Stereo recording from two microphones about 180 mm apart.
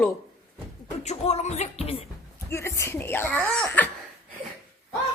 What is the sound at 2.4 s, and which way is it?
Speech, 15° left (ahead or behind).